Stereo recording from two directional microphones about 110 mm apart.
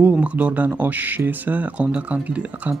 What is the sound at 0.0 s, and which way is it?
Speech, 15° right (ahead or behind).